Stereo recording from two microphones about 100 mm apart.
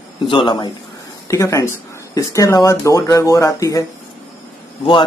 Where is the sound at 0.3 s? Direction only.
55° left (ahead or behind).